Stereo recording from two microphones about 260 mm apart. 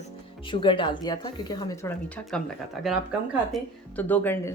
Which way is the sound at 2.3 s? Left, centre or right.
Centre.